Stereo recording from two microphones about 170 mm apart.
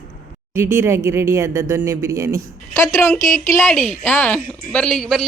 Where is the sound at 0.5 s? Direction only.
15° right (ahead or behind).